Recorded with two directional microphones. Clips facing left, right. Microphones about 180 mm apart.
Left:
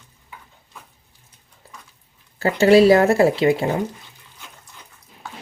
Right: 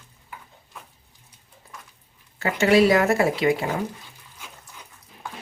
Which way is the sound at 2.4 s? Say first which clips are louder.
Left 5 dB; 30° left (ahead or behind).